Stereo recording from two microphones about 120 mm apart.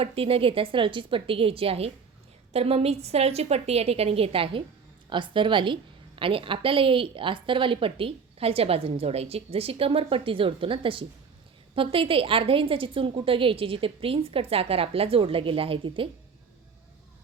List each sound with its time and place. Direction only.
0.0 s a woman's voice: 50° right (ahead or behind)